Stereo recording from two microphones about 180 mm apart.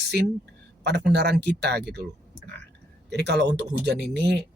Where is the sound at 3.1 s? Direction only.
65° right (ahead or behind).